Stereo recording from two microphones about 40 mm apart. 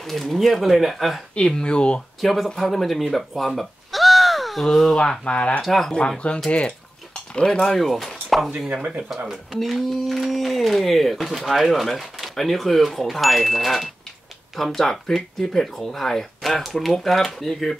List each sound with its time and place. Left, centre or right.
0.0 s speech: centre
1.5 s speech: left
2.2 s speech: centre
2.5 s speech: centre
5.2 s speech: left
5.6 s speech: centre
5.9 s speech: left
7.6 s speech: centre
9.5 s speech: centre